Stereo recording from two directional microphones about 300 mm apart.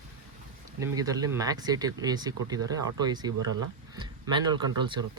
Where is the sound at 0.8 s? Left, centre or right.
Centre.